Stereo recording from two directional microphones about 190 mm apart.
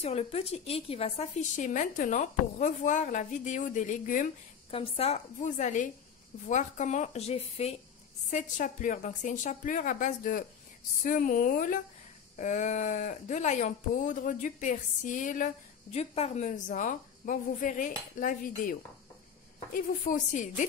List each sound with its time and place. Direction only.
0.0 s speech: 35° left (ahead or behind)
4.6 s a woman's voice: 30° left (ahead or behind)